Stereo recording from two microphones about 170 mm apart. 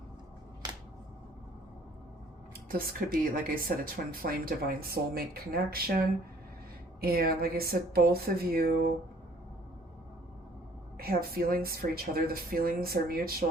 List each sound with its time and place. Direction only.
2.6 s speech: 60° right (ahead or behind)
7.0 s speech: 60° right (ahead or behind)
10.9 s speech: 65° right (ahead or behind)